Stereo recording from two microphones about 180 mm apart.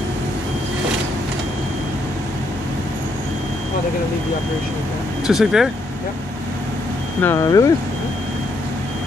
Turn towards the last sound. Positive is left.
turn(degrees=20)  # may be behind; listen again after turning